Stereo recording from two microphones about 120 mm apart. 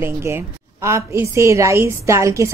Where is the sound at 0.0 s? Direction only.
20° right (ahead or behind).